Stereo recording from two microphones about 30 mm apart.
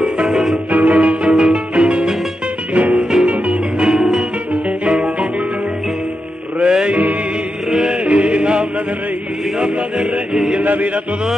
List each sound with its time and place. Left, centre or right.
0.0 s music: right
0.7 s music: right
1.3 s music: right
2.7 s music: right
3.0 s music: centre
3.3 s music: right
3.9 s music: centre
6.6 s music: right
7.9 s music: right
10.6 s music: right